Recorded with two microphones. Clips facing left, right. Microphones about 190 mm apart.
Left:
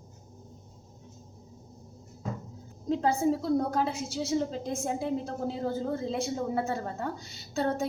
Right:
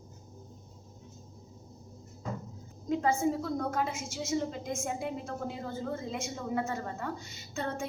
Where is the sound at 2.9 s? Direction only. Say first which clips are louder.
Left 2 dB; 35° left (ahead or behind).